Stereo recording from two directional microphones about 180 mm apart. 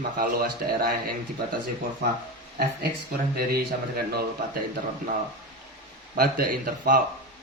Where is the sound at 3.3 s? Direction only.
60° right (ahead or behind).